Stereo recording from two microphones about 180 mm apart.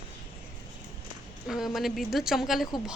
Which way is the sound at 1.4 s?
Centre (ahead or behind).